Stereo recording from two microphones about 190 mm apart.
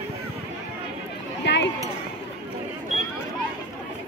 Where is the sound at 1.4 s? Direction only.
65° left (ahead or behind).